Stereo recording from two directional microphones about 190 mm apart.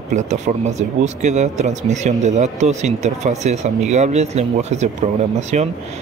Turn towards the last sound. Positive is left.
turn(degrees=-35)  # may be behind; listen again after turning